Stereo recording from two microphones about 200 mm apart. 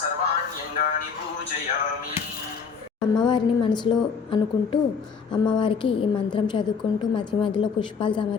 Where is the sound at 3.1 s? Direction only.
20° left (ahead or behind).